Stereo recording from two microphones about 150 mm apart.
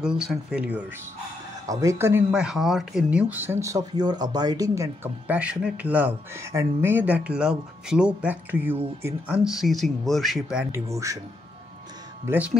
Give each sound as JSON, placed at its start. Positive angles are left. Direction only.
{"t": 0.0, "sound": "speech", "side_deg": -5}
{"t": 1.7, "sound": "speech", "side_deg": -20}
{"t": 2.3, "sound": "speech", "side_deg": -5}
{"t": 10.7, "sound": "speech", "side_deg": -20}
{"t": 12.3, "sound": "speech", "side_deg": -10}